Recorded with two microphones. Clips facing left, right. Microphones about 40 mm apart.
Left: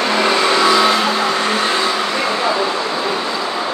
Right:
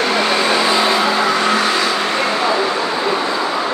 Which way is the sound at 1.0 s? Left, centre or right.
Right.